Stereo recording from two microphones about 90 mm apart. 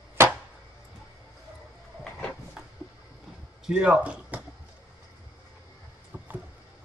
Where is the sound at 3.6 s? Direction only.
10° right (ahead or behind).